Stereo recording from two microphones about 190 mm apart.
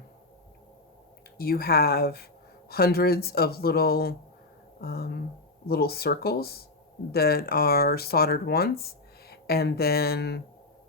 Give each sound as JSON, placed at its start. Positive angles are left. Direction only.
{"t": 1.4, "sound": "speech", "side_deg": 55}